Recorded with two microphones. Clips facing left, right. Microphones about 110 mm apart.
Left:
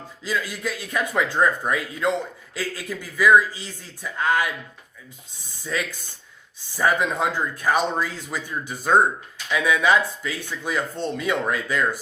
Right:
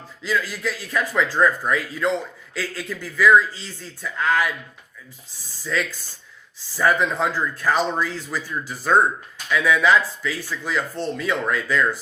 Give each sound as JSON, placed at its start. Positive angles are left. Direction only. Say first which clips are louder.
{"t": 0.3, "sound": "speech", "louder": "right 2 dB", "side_deg": 20}
{"t": 5.6, "sound": "speech", "louder": "right 2 dB", "side_deg": 15}